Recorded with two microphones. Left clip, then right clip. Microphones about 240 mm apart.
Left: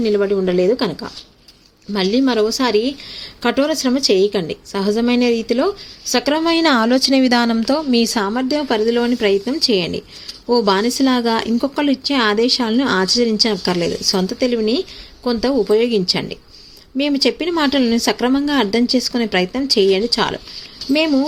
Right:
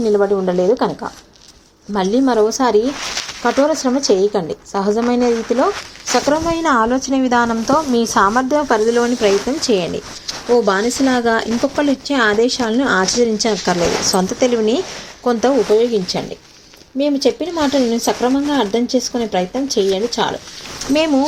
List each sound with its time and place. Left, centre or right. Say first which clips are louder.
0.0 s speech: right 2 dB; left
2.2 s speech: right 2 dB; left